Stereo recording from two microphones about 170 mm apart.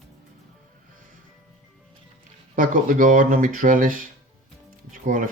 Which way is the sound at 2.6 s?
50° right (ahead or behind).